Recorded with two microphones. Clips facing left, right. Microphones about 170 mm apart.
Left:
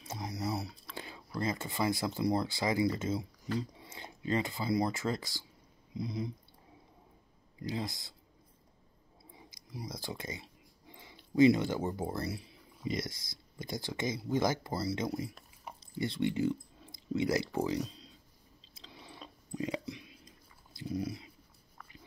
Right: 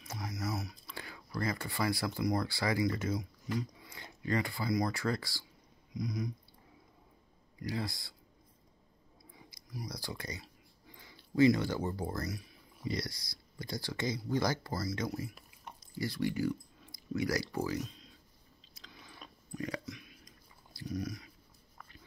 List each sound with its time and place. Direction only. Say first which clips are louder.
0.0 s a sound: left 2 dB; 25° left (ahead or behind)
0.9 s speech: left 1 dB; 25° left (ahead or behind)
7.6 s speech: even; 20° left (ahead or behind)
9.3 s speech: even; 20° left (ahead or behind)
15.3 s a sound: left 2 dB; centre (ahead or behind)
16.0 s speech: left 2 dB; 25° left (ahead or behind)
18.8 s chewing: left 3 dB; 30° left (ahead or behind)
19.5 s a sound: left 3 dB; 15° left (ahead or behind)
19.8 s chewing: left 3 dB; 30° left (ahead or behind)